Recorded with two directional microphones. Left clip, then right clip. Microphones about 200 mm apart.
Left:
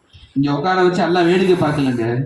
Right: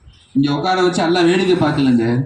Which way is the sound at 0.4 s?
55° right (ahead or behind).